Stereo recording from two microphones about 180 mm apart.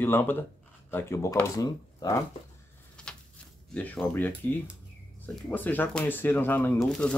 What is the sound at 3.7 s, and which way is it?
Speech, 10° left (ahead or behind).